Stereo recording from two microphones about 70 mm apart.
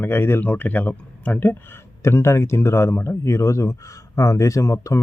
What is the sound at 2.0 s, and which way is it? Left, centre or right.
A man's voice, left.